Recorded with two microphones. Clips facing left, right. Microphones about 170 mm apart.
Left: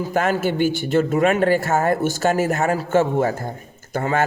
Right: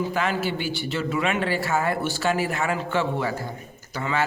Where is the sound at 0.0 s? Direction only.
45° left (ahead or behind).